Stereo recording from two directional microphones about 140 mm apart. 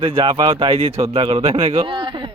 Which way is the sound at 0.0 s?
40° right (ahead or behind).